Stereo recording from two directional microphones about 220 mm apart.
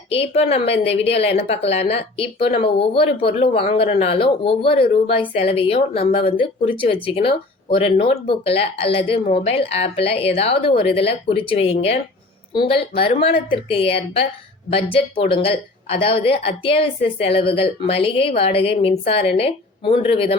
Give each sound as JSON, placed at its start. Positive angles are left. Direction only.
{"t": 0.1, "sound": "speech", "side_deg": 25}